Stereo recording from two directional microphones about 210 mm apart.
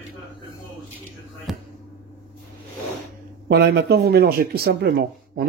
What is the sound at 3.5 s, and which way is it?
Speech, 55° right (ahead or behind).